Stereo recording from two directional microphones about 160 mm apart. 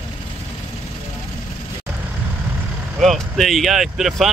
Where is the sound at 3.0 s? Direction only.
Centre (ahead or behind).